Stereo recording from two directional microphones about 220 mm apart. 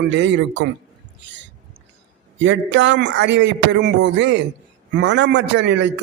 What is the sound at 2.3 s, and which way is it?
A man's voice, 55° right (ahead or behind).